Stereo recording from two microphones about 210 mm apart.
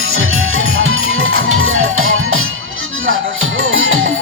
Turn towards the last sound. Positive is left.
turn(degrees=-70)  # may be behind; listen again after turning